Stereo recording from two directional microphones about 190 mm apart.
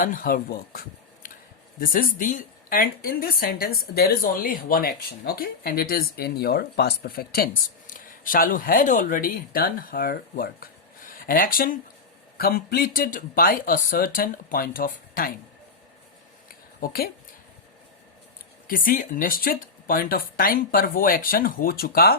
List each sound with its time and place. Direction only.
0.0 s a woman's voice: 45° left (ahead or behind)
16.8 s a woman's voice: 55° left (ahead or behind)
18.7 s a woman's voice: 50° left (ahead or behind)